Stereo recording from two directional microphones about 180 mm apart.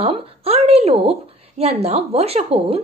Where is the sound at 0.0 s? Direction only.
35° right (ahead or behind).